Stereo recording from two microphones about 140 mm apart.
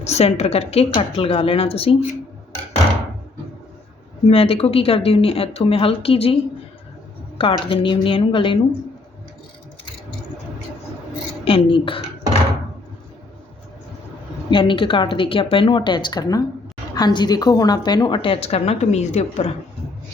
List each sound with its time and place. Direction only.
0.0 s a woman's voice: 50° left (ahead or behind)
4.3 s a woman's voice: 40° left (ahead or behind)
11.4 s speech: 40° left (ahead or behind)
14.5 s a woman's voice: 35° left (ahead or behind); by 19.5 s 50° left (ahead or behind)